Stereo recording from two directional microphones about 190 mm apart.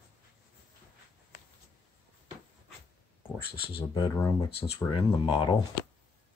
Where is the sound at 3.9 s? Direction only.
15° left (ahead or behind).